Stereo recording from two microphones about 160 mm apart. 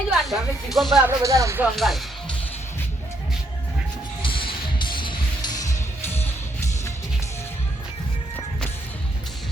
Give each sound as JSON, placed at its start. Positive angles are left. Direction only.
{"t": 0.1, "sound": "speech", "side_deg": 0}
{"t": 1.0, "sound": "speech", "side_deg": -20}
{"t": 1.7, "sound": "speech", "side_deg": 0}
{"t": 4.2, "sound": "music", "side_deg": 30}